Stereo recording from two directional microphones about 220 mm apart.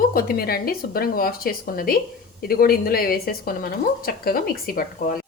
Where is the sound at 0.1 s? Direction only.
40° left (ahead or behind).